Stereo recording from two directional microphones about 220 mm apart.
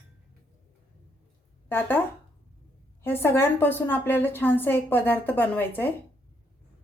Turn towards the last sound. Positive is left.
turn(degrees=10)  # may be behind; listen again after turning